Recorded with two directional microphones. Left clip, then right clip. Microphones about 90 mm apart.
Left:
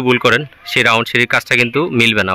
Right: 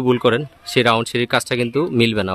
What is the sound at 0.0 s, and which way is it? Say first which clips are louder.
Speech: left 4 dB; 25° right (ahead or behind).